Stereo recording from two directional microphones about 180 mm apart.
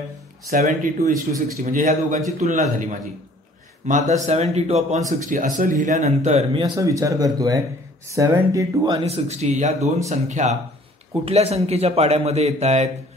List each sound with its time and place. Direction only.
0.5 s a man's voice: 50° right (ahead or behind)
5.2 s a man's voice: 45° right (ahead or behind)
6.6 s speech: 20° right (ahead or behind)
8.9 s a man's voice: 35° right (ahead or behind)